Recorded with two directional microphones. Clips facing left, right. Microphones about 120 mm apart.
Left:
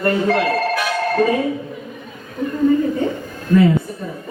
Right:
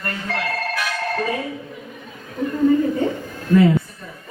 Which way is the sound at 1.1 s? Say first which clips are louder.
Left 8 dB; 25° left (ahead or behind).